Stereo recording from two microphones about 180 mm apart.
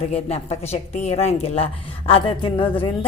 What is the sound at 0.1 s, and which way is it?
A woman's voice, 35° left (ahead or behind).